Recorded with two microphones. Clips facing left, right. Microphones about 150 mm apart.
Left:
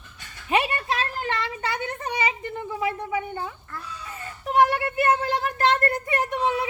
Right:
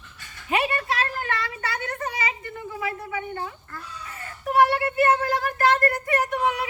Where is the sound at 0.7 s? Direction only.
25° left (ahead or behind).